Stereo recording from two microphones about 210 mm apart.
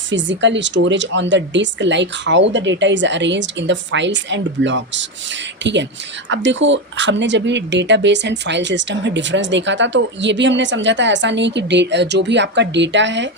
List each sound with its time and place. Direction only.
0.1 s speech: 60° right (ahead or behind)